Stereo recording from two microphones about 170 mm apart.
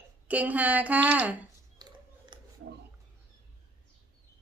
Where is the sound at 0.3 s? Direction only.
10° right (ahead or behind).